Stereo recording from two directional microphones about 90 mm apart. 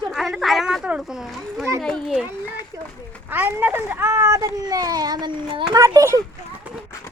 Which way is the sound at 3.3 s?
20° right (ahead or behind).